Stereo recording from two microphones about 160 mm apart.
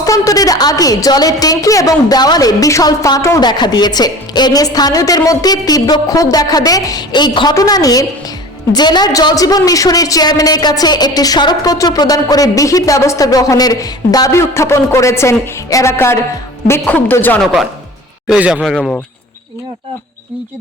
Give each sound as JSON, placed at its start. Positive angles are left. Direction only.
{"t": 0.0, "sound": "a woman's voice", "side_deg": 20}
{"t": 17.4, "sound": "speech", "side_deg": 0}